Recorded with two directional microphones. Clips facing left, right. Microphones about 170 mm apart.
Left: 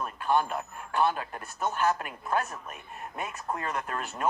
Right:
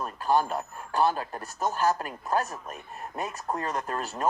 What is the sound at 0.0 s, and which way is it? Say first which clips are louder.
Speech: right 2 dB; 35° right (ahead or behind).